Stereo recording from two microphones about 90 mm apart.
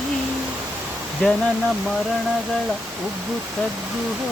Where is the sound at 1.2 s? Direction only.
10° left (ahead or behind).